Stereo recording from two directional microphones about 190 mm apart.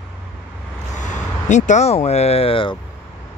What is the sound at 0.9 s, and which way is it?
Speech, 40° left (ahead or behind).